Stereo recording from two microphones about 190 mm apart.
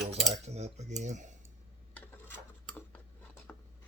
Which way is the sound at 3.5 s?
10° left (ahead or behind).